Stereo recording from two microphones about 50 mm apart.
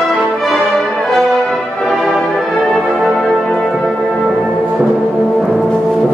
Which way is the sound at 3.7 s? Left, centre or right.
Centre.